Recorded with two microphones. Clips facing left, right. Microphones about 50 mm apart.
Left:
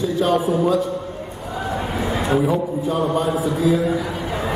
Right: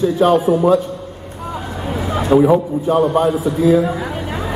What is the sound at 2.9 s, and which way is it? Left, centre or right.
Speech, right.